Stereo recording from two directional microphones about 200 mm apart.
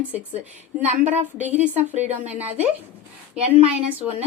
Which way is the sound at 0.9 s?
35° right (ahead or behind).